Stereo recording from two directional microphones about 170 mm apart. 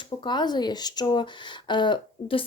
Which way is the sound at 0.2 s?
25° left (ahead or behind).